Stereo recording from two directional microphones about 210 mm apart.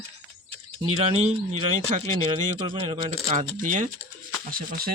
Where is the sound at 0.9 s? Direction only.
30° right (ahead or behind).